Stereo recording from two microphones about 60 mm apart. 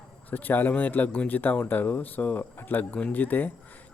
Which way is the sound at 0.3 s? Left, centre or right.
Left.